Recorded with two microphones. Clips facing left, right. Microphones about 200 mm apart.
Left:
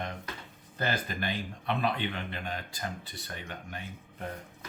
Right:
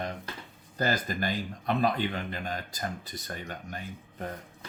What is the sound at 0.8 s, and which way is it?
A man's voice, 40° right (ahead or behind).